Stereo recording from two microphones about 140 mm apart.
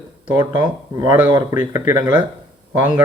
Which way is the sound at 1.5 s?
15° right (ahead or behind).